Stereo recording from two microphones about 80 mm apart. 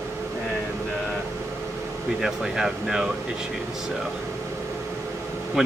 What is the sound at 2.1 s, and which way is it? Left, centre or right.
Speech, centre.